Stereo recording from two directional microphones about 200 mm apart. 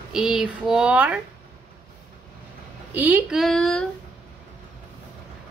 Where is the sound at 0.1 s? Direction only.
5° right (ahead or behind).